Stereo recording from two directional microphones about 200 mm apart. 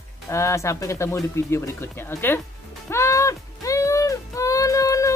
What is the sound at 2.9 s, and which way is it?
Music, 15° left (ahead or behind).